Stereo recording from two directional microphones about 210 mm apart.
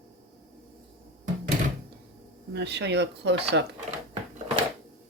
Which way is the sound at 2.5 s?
55° right (ahead or behind).